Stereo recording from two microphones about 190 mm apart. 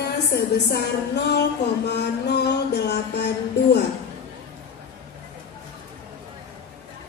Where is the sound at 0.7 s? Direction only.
60° left (ahead or behind).